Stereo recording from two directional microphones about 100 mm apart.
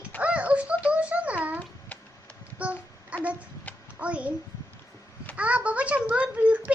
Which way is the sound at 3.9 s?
15° right (ahead or behind).